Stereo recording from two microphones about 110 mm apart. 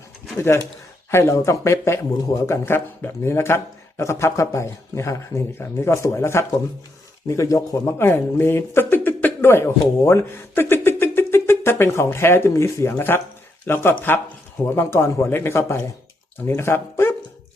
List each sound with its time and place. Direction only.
0.3 s speech: 25° left (ahead or behind)